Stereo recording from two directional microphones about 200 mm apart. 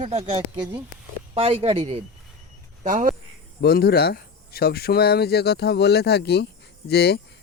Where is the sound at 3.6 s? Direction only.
50° left (ahead or behind).